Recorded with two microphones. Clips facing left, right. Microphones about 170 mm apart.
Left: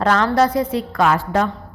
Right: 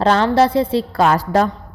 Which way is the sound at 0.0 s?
30° right (ahead or behind).